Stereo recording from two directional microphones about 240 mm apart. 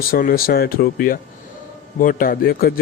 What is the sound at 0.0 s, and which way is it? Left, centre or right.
Speech, left.